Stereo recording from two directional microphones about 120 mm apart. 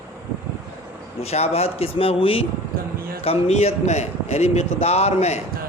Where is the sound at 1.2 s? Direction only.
60° left (ahead or behind).